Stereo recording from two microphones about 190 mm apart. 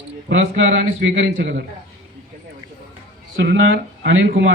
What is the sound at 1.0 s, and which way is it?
Speech, 65° right (ahead or behind).